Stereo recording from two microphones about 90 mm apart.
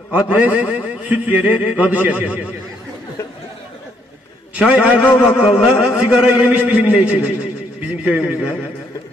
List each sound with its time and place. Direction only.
0.1 s a man's voice: 15° right (ahead or behind)
4.6 s a man's voice: 15° right (ahead or behind)